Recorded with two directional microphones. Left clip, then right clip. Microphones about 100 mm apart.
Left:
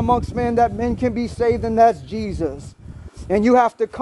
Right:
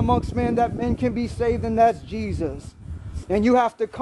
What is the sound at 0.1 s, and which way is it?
Speech, 5° left (ahead or behind).